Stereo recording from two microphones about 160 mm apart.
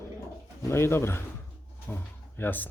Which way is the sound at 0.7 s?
15° left (ahead or behind).